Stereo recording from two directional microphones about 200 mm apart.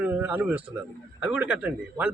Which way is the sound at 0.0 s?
10° right (ahead or behind).